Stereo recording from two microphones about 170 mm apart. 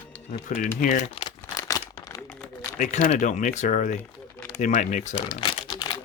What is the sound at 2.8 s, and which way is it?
Speech, 45° left (ahead or behind).